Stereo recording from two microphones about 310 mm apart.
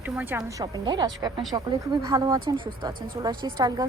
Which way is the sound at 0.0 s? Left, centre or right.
Centre.